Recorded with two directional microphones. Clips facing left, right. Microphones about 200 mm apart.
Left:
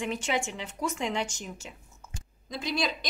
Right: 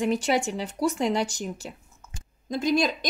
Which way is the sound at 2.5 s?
45° right (ahead or behind).